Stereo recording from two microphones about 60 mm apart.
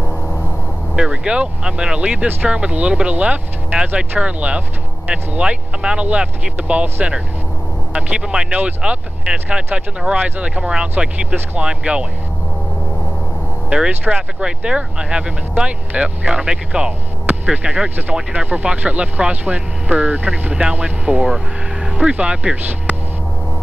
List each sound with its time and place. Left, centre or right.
0.9 s speech: centre
13.7 s speech: centre
17.8 s speech: right